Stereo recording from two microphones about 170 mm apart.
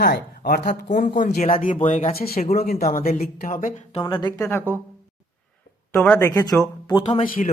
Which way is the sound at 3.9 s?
25° left (ahead or behind).